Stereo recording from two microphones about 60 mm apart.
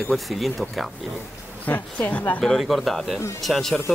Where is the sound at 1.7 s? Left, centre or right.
Left.